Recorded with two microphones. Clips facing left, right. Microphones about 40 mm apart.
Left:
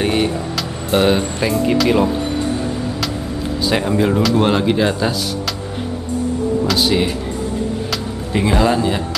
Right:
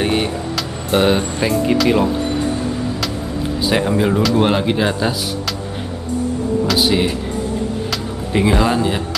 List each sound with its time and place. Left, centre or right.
0.0 s speech: centre
3.6 s speech: centre
6.7 s speech: centre
7.9 s music: centre